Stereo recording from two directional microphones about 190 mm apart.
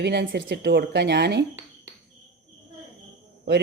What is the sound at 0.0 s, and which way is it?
Speech, 65° right (ahead or behind).